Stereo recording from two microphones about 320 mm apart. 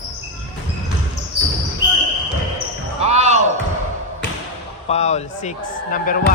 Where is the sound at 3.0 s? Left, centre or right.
Right.